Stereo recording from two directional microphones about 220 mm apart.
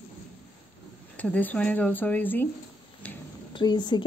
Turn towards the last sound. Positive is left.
turn(degrees=20)  # may be behind; listen again after turning